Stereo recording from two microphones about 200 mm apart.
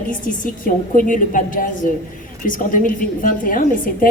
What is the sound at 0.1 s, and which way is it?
A woman's voice, 40° left (ahead or behind).